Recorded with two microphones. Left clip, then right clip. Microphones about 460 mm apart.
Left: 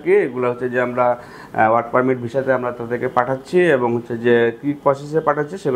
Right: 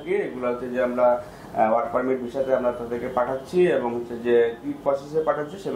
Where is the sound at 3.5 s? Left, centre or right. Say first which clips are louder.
Left 6 dB; left.